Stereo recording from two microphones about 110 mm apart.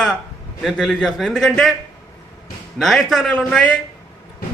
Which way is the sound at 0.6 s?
5° left (ahead or behind).